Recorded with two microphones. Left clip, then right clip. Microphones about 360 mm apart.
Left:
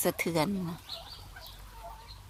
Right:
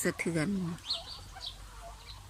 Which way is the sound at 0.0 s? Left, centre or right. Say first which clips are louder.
Left 3 dB; centre.